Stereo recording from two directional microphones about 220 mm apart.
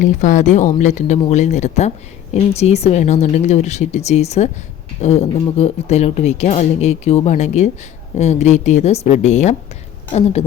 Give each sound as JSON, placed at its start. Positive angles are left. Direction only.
{"t": 0.0, "sound": "speech", "side_deg": 35}